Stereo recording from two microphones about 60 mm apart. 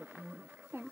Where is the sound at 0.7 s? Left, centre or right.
Right.